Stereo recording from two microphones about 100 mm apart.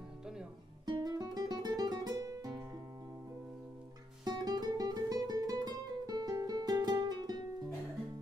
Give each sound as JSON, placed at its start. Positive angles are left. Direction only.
{"t": 0.8, "sound": "music", "side_deg": -45}
{"t": 4.2, "sound": "music", "side_deg": -45}